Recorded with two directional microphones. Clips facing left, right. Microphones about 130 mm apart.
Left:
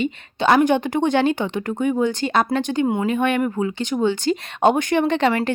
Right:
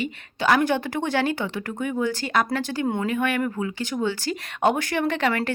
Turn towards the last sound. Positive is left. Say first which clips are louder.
# left 5 dB
turn(degrees=25)  # may be behind; listen again after turning